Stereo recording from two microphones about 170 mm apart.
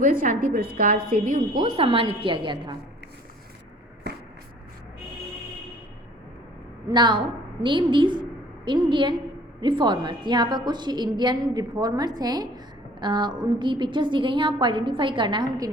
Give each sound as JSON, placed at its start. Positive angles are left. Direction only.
{"t": 0.0, "sound": "a woman's voice", "side_deg": -55}
{"t": 1.6, "sound": "a woman's voice", "side_deg": -35}
{"t": 6.8, "sound": "a woman's voice", "side_deg": -25}